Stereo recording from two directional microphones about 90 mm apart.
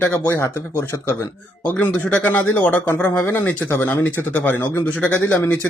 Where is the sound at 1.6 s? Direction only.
20° left (ahead or behind).